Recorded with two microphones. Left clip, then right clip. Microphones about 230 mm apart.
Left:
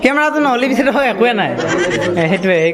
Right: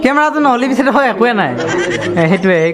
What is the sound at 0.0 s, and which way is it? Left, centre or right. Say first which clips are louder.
A man's voice: right 2 dB; centre.